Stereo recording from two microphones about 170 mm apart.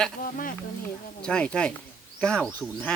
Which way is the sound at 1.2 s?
5° left (ahead or behind).